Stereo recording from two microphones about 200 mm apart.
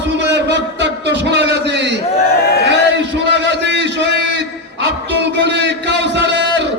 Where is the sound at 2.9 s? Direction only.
60° right (ahead or behind).